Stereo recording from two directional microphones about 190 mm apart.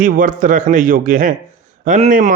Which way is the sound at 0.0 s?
40° right (ahead or behind).